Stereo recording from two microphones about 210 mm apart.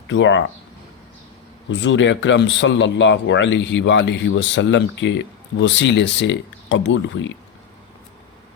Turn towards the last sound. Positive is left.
turn(degrees=60)  # may be behind; listen again after turning